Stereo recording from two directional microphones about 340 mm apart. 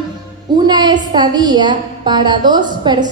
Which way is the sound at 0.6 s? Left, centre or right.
Centre.